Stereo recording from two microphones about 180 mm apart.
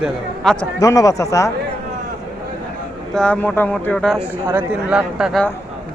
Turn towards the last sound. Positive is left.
turn(degrees=-5)  # may be behind; listen again after turning